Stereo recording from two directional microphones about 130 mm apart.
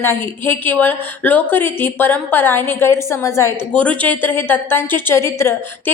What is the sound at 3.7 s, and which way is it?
A woman's voice, 10° left (ahead or behind).